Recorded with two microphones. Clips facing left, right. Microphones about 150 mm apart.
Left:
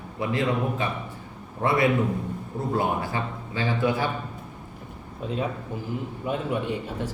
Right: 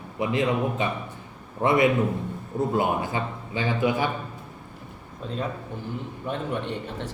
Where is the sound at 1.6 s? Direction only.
20° right (ahead or behind).